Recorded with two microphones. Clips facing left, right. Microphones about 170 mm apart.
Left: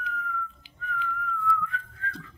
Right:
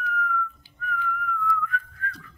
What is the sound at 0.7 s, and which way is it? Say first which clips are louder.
Whistling: right 3 dB; 25° left (ahead or behind).